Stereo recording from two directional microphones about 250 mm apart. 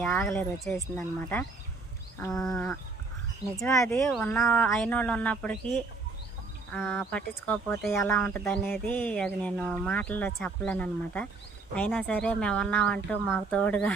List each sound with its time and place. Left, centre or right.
0.0 s speech: centre
2.1 s livestock: centre
3.6 s speech: centre
6.7 s speech: centre